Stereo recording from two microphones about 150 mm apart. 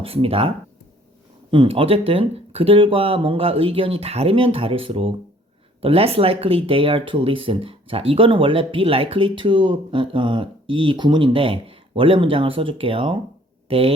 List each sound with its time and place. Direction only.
0.0 s speech: 40° right (ahead or behind)